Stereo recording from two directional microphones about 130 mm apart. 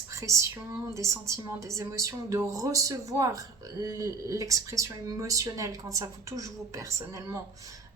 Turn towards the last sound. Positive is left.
turn(degrees=-25)  # may be behind; listen again after turning